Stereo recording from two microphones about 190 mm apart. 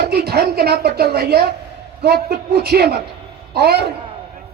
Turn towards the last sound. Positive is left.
turn(degrees=-60)  # may be behind; listen again after turning